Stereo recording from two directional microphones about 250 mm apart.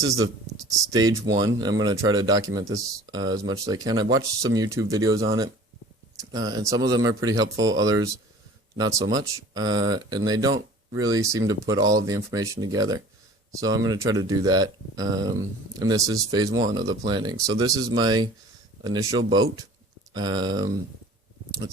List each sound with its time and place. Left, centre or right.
0.0 s speech: centre